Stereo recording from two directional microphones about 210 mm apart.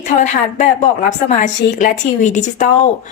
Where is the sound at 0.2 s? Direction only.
35° left (ahead or behind).